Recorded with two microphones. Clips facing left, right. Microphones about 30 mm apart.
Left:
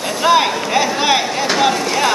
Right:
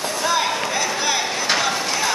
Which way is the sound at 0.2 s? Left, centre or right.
Left.